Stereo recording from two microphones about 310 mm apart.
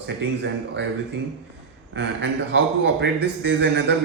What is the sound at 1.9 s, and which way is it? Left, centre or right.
Speech, right.